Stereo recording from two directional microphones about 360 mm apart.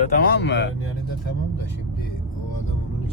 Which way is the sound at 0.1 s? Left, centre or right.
Left.